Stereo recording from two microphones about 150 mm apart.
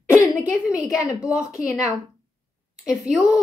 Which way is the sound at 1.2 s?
5° right (ahead or behind).